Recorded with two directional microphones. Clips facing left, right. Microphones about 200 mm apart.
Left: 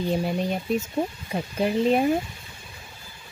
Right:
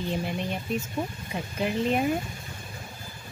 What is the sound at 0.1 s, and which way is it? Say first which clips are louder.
A woman's voice: left 5 dB; 40° left (ahead or behind).